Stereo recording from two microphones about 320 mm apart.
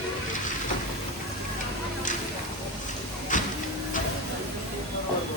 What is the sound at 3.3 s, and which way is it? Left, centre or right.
Printer, left.